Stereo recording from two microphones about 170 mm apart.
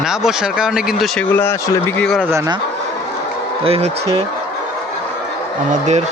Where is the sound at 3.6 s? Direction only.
35° right (ahead or behind).